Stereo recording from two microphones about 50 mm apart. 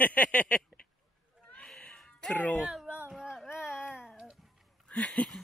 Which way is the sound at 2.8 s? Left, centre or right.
Right.